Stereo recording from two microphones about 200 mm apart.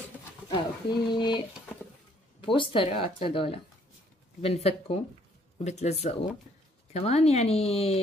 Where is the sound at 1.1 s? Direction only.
20° left (ahead or behind).